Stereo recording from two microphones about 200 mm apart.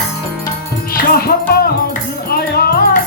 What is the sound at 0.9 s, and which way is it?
Music, 50° left (ahead or behind).